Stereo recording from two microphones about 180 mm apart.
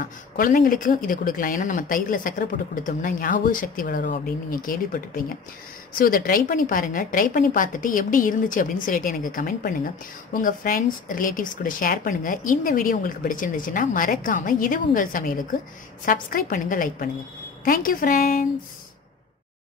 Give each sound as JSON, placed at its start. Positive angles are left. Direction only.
{"t": 0.0, "sound": "speech", "side_deg": 50}